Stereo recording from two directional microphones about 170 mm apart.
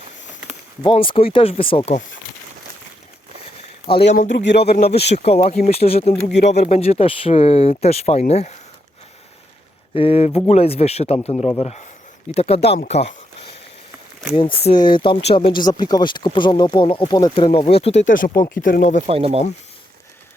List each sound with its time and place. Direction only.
0.8 s speech: 30° left (ahead or behind)
3.9 s speech: 30° left (ahead or behind)
4.3 s speech: 90° left
5.1 s speech: 35° left (ahead or behind)
9.9 s speech: 35° left (ahead or behind)
14.3 s speech: 30° left (ahead or behind)
15.5 s speech: 25° left (ahead or behind); by 18.9 s 50° left (ahead or behind)
19.0 s speech: 35° right (ahead or behind)